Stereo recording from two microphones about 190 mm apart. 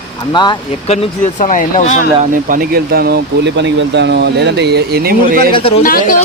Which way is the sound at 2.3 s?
50° right (ahead or behind).